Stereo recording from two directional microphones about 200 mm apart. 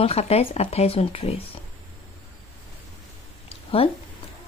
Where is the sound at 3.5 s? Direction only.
30° left (ahead or behind).